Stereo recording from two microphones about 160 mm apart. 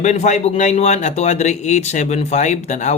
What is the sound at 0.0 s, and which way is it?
A man's voice, 45° left (ahead or behind).